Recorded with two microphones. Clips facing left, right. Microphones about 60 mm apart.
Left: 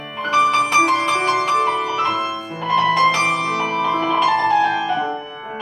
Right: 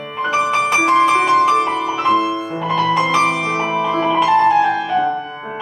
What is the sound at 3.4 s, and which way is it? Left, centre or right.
Music, centre.